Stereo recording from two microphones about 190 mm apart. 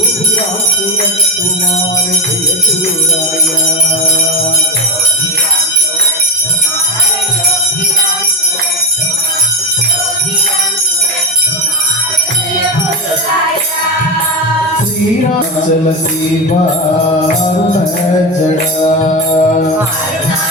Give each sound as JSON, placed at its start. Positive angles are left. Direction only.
{"t": 18.5, "sound": "music", "side_deg": 40}